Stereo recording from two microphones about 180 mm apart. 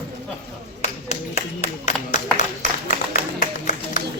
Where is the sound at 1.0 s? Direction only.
35° left (ahead or behind).